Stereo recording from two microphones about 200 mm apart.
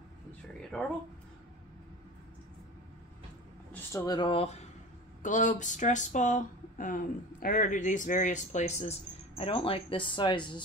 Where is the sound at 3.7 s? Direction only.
15° left (ahead or behind).